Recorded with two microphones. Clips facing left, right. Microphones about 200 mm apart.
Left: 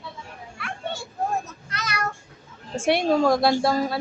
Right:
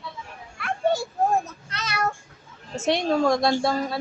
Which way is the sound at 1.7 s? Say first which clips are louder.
Even; 25° right (ahead or behind).